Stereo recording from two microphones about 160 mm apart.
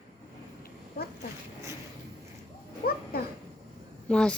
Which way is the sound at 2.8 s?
70° left (ahead or behind).